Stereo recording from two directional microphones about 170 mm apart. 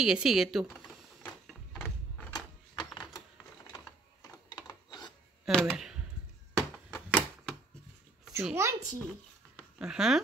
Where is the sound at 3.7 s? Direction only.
20° left (ahead or behind).